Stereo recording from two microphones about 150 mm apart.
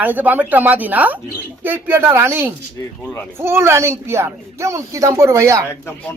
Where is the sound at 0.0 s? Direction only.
10° right (ahead or behind).